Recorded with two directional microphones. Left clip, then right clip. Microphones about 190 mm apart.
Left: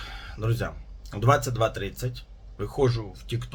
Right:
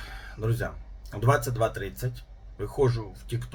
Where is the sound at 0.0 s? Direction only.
15° left (ahead or behind).